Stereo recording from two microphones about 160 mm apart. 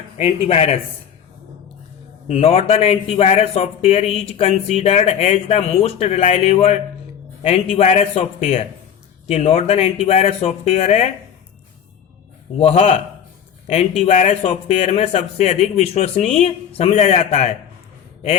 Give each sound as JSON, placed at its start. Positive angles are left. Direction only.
{"t": 0.2, "sound": "speech", "side_deg": 40}
{"t": 2.2, "sound": "speech", "side_deg": 40}
{"t": 12.5, "sound": "speech", "side_deg": 45}